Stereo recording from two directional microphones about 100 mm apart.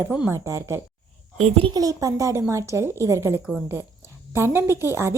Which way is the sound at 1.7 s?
35° right (ahead or behind).